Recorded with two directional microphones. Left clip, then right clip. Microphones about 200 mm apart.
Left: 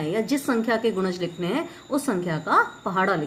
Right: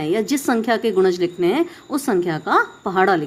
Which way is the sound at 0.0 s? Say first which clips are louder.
Right 5 dB; 45° right (ahead or behind).